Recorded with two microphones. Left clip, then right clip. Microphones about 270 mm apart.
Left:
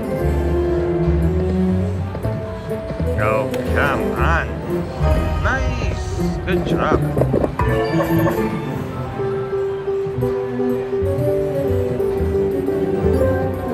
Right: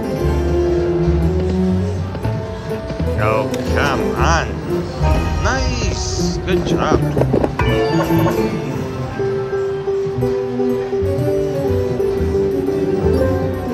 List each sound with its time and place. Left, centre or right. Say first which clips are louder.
3.2 s music: right 1 dB; centre
6.2 s speech: right 1 dB; centre